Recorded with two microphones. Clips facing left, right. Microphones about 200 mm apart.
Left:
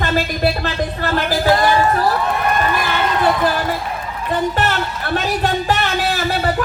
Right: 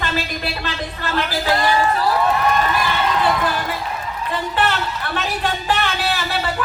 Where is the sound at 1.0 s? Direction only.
45° left (ahead or behind).